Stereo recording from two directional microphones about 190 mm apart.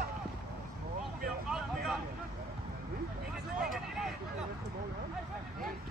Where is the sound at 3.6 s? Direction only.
Centre (ahead or behind).